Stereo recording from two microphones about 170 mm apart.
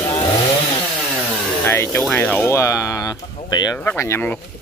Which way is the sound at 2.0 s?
5° left (ahead or behind).